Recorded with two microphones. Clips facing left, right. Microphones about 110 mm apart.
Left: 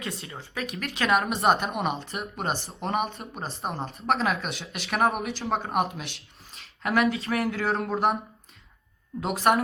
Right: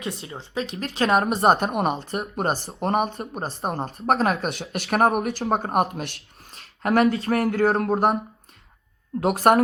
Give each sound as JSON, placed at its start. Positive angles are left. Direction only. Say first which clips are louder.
{"t": 0.0, "sound": "a woman's voice", "louder": "right 4 dB", "side_deg": -25}
{"t": 6.6, "sound": "speech", "louder": "right 5 dB", "side_deg": -40}
{"t": 9.2, "sound": "speech", "louder": "right 5 dB", "side_deg": -50}